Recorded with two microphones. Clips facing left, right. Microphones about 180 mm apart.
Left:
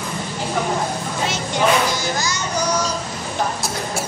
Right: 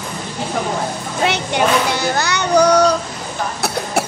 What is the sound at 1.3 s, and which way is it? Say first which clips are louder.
Child singing: right 1 dB; 65° right (ahead or behind).